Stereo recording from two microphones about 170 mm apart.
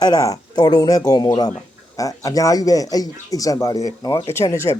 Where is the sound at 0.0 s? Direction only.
20° left (ahead or behind).